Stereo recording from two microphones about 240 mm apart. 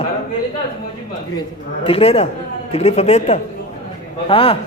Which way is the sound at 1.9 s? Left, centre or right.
Left.